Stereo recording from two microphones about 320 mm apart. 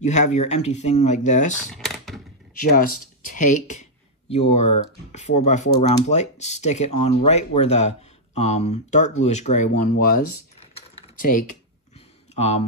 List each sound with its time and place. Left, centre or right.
0.0 s speech: left
1.7 s typing: centre
2.6 s speech: left